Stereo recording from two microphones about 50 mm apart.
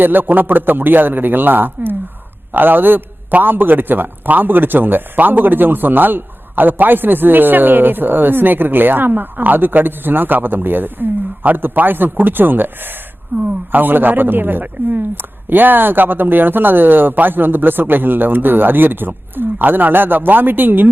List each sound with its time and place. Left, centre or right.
0.0 s a man's voice: right